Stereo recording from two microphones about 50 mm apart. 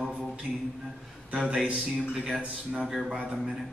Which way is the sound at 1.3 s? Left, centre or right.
Centre.